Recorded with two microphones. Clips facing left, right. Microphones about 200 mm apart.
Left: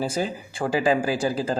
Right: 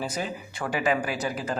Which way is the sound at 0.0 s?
30° left (ahead or behind).